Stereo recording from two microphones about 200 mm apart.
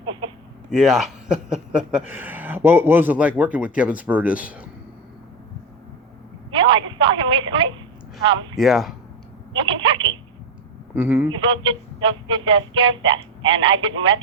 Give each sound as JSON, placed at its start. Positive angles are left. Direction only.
{"t": 0.7, "sound": "a man's voice", "side_deg": 0}
{"t": 6.5, "sound": "a sound", "side_deg": -25}
{"t": 8.5, "sound": "a man's voice", "side_deg": 0}
{"t": 9.6, "sound": "telephone", "side_deg": -25}
{"t": 10.9, "sound": "a man's voice", "side_deg": -10}
{"t": 11.3, "sound": "speech", "side_deg": -25}